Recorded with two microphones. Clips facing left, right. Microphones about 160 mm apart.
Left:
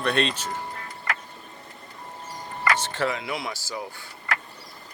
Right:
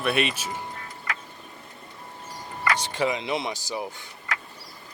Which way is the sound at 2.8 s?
15° right (ahead or behind).